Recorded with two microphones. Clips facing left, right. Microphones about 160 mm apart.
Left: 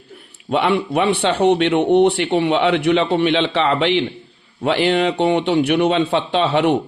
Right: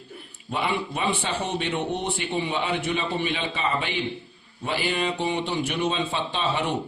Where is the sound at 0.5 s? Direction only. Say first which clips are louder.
Left 10 dB; 70° left (ahead or behind).